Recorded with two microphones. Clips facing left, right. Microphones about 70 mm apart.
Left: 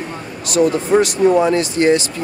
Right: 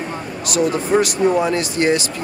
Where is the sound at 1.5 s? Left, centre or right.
Left.